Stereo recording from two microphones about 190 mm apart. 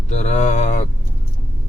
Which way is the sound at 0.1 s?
35° left (ahead or behind).